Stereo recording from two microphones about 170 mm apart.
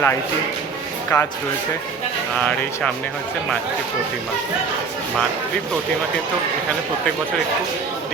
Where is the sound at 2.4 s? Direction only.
5° left (ahead or behind).